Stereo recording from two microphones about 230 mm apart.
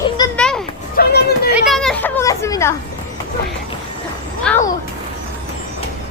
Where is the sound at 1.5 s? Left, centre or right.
Centre.